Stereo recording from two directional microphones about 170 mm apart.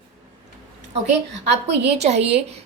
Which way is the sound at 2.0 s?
40° right (ahead or behind).